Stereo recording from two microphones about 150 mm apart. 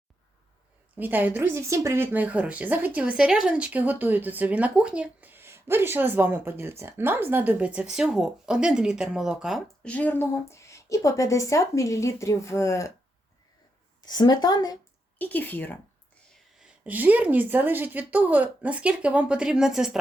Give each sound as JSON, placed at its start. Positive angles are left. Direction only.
{"t": 0.9, "sound": "speech", "side_deg": -10}
{"t": 14.0, "sound": "speech", "side_deg": 25}
{"t": 15.2, "sound": "speech", "side_deg": 10}
{"t": 16.6, "sound": "speech", "side_deg": -5}